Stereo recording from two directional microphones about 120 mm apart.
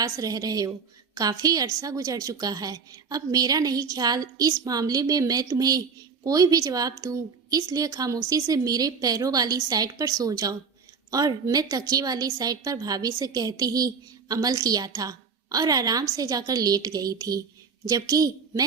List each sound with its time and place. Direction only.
0.0 s a woman's voice: 30° right (ahead or behind)